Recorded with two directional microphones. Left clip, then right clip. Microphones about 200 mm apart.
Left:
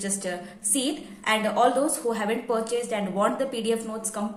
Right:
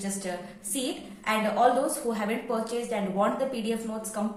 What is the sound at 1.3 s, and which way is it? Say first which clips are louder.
A woman's voice: left 2 dB; 35° left (ahead or behind).